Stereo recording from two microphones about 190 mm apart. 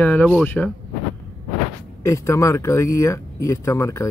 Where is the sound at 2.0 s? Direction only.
15° left (ahead or behind).